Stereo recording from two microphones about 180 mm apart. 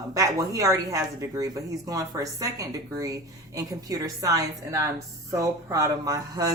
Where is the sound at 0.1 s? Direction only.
20° right (ahead or behind).